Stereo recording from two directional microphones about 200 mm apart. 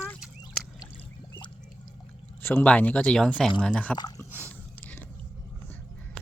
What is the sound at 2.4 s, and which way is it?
Speech, 10° left (ahead or behind).